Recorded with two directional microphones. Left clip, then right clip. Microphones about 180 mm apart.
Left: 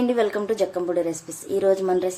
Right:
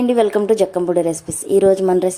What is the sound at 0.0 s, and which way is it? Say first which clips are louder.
A woman's voice: right 7 dB; 25° right (ahead or behind).